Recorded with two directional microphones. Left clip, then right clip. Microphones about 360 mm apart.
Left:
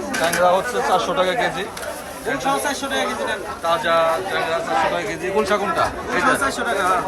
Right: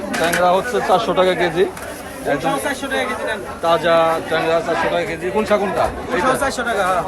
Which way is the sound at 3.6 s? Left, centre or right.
Centre.